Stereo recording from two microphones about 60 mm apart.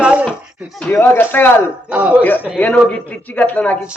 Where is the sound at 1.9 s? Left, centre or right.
Centre.